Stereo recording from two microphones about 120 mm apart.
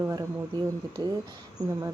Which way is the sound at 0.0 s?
30° right (ahead or behind).